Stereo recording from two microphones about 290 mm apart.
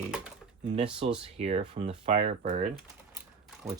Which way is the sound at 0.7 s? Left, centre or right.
Centre.